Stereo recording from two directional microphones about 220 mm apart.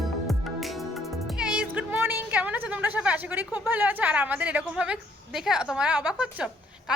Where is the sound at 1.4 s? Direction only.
5° right (ahead or behind).